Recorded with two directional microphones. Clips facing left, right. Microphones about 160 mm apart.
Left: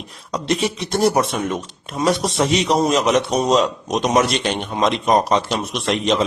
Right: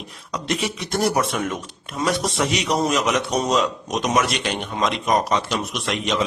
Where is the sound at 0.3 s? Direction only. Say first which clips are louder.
Left 4 dB; 25° left (ahead or behind).